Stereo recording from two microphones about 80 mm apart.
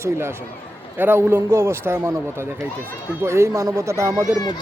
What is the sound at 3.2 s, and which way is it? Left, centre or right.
Speech, right.